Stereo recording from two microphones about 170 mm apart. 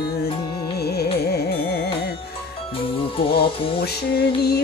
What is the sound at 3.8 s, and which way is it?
Music, 65° left (ahead or behind).